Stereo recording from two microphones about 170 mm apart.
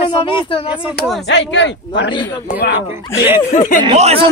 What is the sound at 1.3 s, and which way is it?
Speech, 90° left.